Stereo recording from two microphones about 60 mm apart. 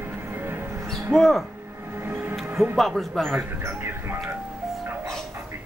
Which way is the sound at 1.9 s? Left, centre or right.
Right.